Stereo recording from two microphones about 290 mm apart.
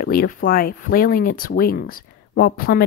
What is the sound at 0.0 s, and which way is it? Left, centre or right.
Speech, left.